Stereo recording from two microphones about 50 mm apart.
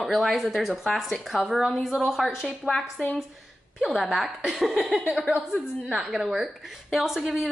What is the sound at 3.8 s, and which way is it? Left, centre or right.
Speech, centre.